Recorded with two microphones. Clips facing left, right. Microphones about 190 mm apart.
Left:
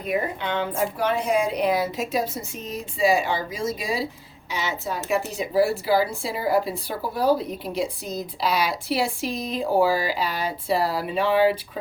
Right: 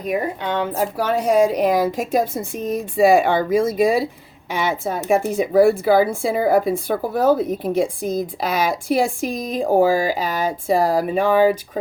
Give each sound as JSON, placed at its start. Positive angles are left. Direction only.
{"t": 0.0, "sound": "a woman's voice", "side_deg": -40}